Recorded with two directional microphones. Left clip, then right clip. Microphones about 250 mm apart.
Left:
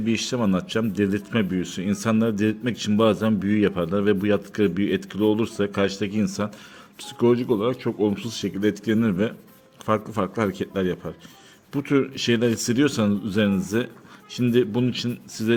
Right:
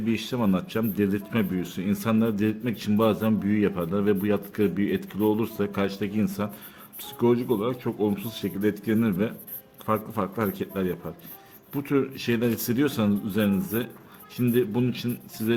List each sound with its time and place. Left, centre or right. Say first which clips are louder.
0.0 s speech: left 3 dB; centre